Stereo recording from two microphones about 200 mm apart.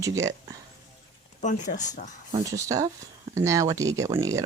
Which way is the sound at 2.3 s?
15° right (ahead or behind).